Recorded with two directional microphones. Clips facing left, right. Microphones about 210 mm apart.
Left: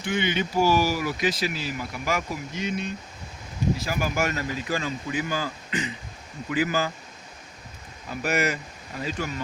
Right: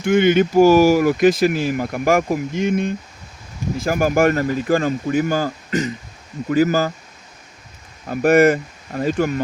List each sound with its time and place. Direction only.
0.0 s speech: 50° right (ahead or behind)
8.0 s speech: 50° right (ahead or behind)